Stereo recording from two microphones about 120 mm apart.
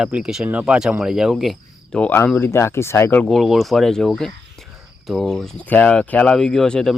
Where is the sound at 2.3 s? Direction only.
20° left (ahead or behind).